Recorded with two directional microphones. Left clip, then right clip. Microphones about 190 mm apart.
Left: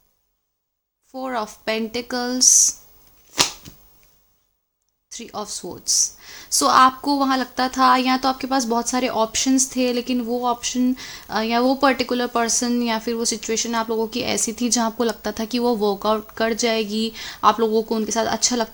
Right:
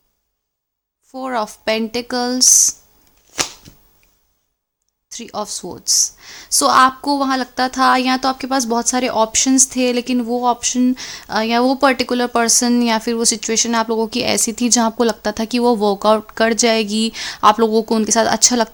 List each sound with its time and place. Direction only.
1.1 s a woman's voice: 30° right (ahead or behind)
5.0 s a woman's voice: 30° right (ahead or behind)